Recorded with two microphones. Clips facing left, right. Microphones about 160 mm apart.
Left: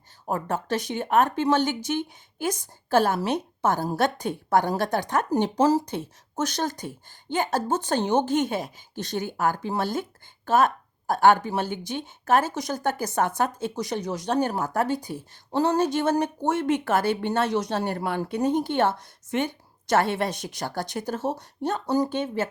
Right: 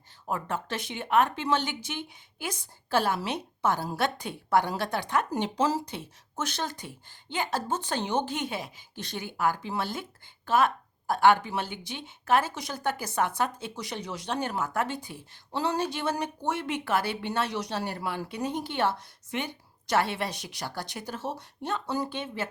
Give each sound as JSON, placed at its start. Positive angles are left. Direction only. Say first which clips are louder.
{"t": 0.3, "sound": "speech", "louder": "left 5 dB", "side_deg": 40}